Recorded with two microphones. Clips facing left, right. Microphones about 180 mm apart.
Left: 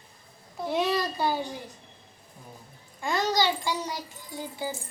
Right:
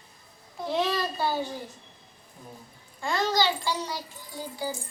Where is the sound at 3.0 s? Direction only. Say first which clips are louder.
Even; 15° left (ahead or behind).